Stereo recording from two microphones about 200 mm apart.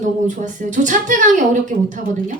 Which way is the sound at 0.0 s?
40° right (ahead or behind).